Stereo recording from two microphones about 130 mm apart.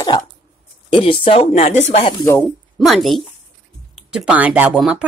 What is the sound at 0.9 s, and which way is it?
Speech, 45° left (ahead or behind).